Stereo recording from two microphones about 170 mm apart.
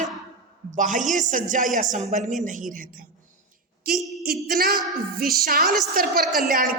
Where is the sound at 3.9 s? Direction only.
Centre (ahead or behind).